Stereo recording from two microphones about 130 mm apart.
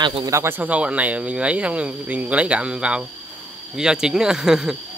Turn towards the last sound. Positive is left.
turn(degrees=-5)  # may be behind; listen again after turning